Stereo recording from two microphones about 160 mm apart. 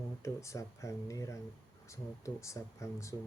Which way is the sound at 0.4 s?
20° left (ahead or behind).